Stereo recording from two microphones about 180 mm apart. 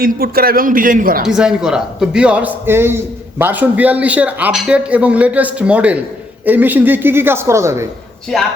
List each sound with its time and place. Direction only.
0.0 s a man's voice: 55° right (ahead or behind)
1.3 s a man's voice: 5° right (ahead or behind)
8.3 s speech: centre (ahead or behind)